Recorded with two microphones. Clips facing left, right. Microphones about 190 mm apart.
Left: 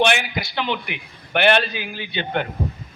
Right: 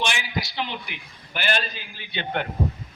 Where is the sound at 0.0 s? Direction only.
60° left (ahead or behind).